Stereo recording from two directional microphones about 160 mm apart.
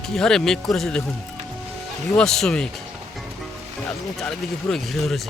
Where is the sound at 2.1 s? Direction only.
5° left (ahead or behind).